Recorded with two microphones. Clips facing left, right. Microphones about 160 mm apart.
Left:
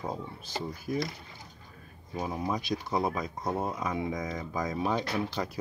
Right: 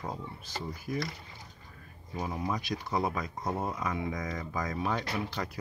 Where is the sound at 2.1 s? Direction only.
20° left (ahead or behind).